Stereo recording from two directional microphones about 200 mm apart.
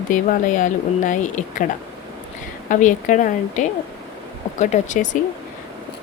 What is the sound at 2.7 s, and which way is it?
Speech, 40° left (ahead or behind).